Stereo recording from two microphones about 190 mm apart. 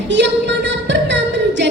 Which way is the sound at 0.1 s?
70° right (ahead or behind).